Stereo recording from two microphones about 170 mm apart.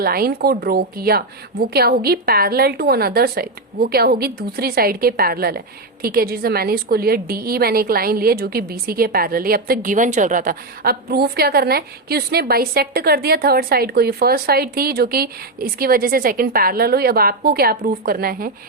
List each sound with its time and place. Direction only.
0.0 s a woman's voice: 65° right (ahead or behind)